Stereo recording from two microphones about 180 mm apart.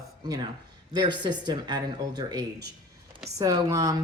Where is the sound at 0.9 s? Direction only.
25° right (ahead or behind).